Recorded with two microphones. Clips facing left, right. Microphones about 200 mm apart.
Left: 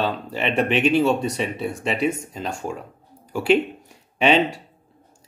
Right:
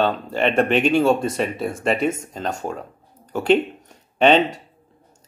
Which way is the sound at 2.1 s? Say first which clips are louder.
Right 2 dB; 40° right (ahead or behind).